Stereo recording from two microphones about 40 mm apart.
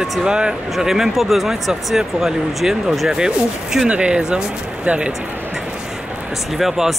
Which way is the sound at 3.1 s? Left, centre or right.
Centre.